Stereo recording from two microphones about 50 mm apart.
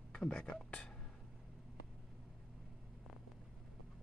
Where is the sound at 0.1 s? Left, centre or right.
Left.